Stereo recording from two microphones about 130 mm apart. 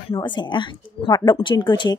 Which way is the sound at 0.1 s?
35° left (ahead or behind).